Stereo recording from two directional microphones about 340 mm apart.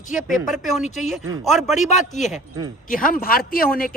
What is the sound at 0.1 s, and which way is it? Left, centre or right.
Speech, centre.